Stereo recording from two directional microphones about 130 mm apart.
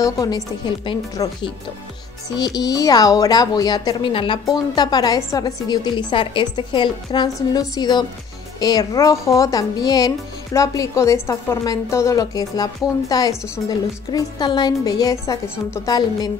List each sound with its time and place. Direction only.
0.0 s a woman's voice: 30° left (ahead or behind)
4.7 s a woman's voice: 30° left (ahead or behind)
7.3 s speech: 25° left (ahead or behind)